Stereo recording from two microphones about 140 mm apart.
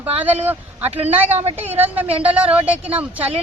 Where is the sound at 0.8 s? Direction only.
50° right (ahead or behind).